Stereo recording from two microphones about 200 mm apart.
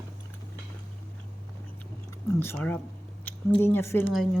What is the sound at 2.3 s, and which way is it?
Speech, 10° left (ahead or behind).